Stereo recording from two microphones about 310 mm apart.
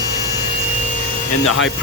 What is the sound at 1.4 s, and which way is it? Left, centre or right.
Speech, left.